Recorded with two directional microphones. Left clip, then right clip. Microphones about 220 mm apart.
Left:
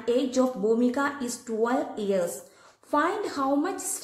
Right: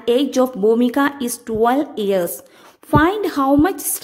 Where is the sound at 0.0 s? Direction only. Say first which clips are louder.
Right 8 dB; 45° right (ahead or behind).